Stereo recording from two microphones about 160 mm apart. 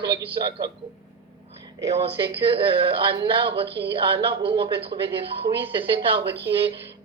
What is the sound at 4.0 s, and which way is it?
A woman's voice, 30° right (ahead or behind).